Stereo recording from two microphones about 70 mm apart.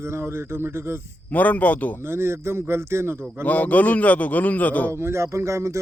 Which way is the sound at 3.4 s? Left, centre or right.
Left.